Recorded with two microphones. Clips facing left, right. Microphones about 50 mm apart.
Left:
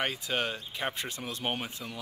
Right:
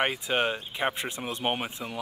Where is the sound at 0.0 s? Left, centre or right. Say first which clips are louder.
Right 5 dB; right.